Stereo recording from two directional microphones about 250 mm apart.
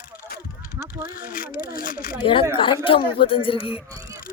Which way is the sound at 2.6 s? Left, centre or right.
Left.